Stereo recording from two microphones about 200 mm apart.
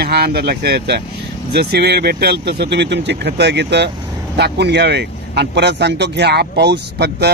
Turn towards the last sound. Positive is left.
turn(degrees=-55)  # may be behind; listen again after turning